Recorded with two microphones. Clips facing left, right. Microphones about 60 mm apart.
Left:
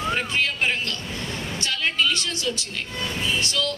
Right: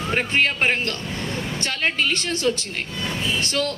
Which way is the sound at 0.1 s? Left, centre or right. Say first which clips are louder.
Right 6 dB; right.